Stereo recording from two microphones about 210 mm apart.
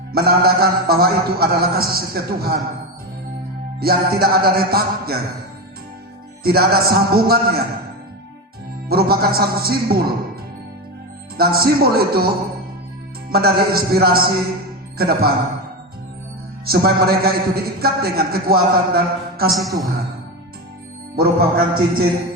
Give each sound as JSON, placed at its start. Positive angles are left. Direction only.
{"t": 0.1, "sound": "a man's voice", "side_deg": -45}
{"t": 3.8, "sound": "a man's voice", "side_deg": -45}
{"t": 6.4, "sound": "a man's voice", "side_deg": -45}
{"t": 8.9, "sound": "a man's voice", "side_deg": -45}
{"t": 11.3, "sound": "a man's voice", "side_deg": -45}
{"t": 13.3, "sound": "a man's voice", "side_deg": -45}
{"t": 16.6, "sound": "a man's voice", "side_deg": -45}
{"t": 19.6, "sound": "a woman's voice", "side_deg": 0}
{"t": 21.2, "sound": "a man's voice", "side_deg": -45}